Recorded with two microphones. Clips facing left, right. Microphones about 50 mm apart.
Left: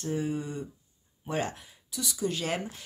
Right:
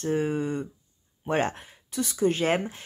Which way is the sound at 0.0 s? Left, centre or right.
Right.